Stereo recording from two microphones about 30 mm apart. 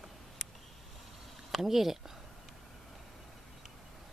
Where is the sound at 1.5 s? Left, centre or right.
Centre.